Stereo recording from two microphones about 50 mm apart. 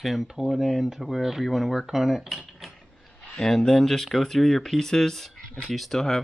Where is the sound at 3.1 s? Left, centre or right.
Left.